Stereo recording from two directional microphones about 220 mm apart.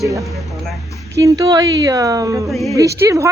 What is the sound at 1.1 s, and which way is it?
A woman's voice, 15° right (ahead or behind).